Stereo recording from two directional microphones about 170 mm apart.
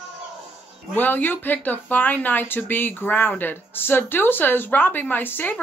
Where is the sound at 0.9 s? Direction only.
10° left (ahead or behind).